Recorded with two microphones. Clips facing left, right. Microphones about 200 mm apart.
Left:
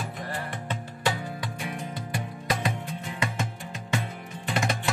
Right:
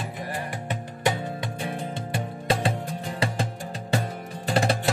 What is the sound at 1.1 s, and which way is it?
Music, 25° right (ahead or behind).